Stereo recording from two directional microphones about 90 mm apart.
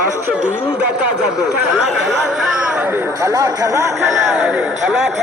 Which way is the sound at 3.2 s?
35° right (ahead or behind).